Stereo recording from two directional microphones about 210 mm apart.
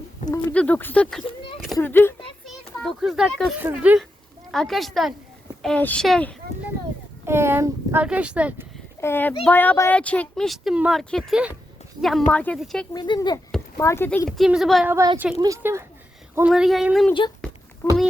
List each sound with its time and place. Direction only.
0.2 s speech: 35° left (ahead or behind)
0.5 s speech: 5° left (ahead or behind)
1.9 s speech: 10° left (ahead or behind)
2.5 s a child's voice: centre (ahead or behind)
7.3 s speech: 10° right (ahead or behind)
9.0 s a child's voice: 10° left (ahead or behind)
12.9 s speech: 20° left (ahead or behind); by 14.9 s centre (ahead or behind)
14.9 s speech: 15° right (ahead or behind)
17.8 s speech: 10° left (ahead or behind)